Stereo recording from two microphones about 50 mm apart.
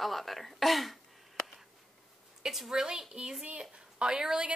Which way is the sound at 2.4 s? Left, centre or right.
Centre.